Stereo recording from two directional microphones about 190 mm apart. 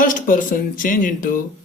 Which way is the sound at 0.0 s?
45° left (ahead or behind).